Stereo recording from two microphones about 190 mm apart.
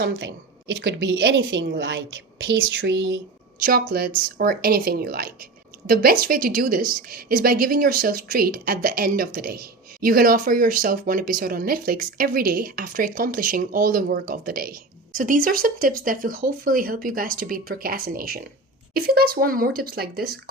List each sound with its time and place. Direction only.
0.0 s a woman's voice: 70° right (ahead or behind)
3.6 s speech: 50° right (ahead or behind)